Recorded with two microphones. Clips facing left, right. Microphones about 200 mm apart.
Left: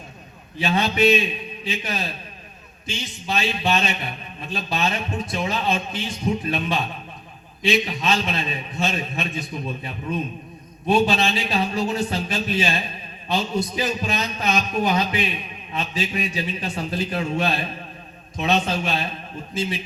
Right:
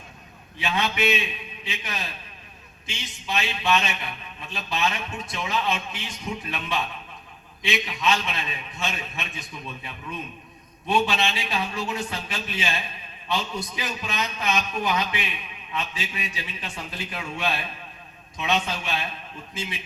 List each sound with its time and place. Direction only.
0.6 s a man's voice: 35° left (ahead or behind)
3.2 s a man's voice: 35° left (ahead or behind)